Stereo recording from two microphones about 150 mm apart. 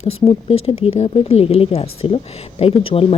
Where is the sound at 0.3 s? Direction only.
40° left (ahead or behind).